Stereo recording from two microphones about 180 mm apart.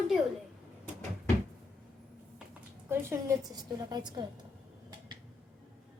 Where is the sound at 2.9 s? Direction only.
15° right (ahead or behind).